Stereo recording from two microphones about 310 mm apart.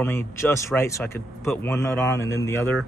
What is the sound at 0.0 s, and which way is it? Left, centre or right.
Speech, centre.